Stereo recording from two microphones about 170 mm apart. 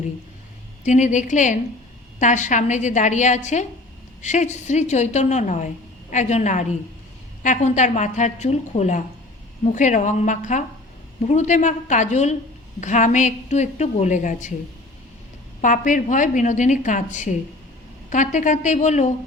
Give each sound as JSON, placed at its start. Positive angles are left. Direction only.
{"t": 0.9, "sound": "a woman's voice", "side_deg": 45}
{"t": 15.6, "sound": "a woman's voice", "side_deg": 50}